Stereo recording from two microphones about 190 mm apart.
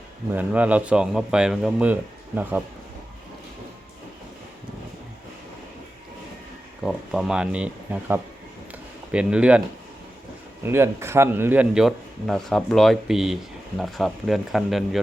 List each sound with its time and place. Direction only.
0.3 s speech: 10° right (ahead or behind)
6.8 s speech: centre (ahead or behind)